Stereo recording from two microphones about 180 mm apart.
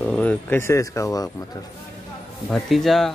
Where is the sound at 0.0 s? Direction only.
5° left (ahead or behind).